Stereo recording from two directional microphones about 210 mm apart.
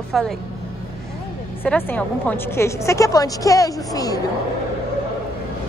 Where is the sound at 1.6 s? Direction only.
10° left (ahead or behind).